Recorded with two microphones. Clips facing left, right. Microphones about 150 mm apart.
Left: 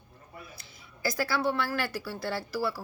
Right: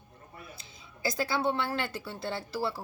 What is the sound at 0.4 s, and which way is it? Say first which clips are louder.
A woman's voice: right 1 dB; 20° right (ahead or behind).